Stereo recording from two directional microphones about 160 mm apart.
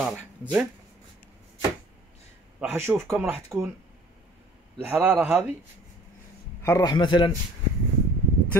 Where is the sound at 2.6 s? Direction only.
15° right (ahead or behind).